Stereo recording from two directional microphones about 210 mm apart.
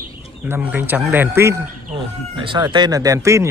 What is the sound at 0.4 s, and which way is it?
Speech, 5° right (ahead or behind).